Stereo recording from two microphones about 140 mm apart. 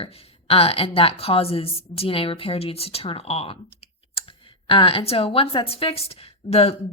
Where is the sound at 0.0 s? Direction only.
45° left (ahead or behind).